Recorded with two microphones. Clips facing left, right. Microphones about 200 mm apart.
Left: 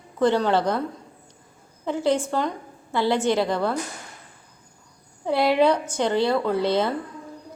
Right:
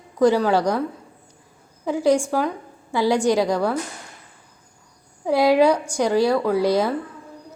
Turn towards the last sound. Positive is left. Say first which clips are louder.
# right 3 dB
turn(degrees=-10)  # may be behind; listen again after turning